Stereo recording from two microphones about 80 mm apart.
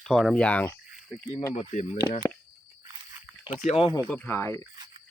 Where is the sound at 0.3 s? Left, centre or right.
Centre.